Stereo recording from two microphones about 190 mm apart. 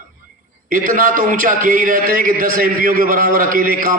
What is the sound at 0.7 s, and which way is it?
A man's voice, 45° right (ahead or behind).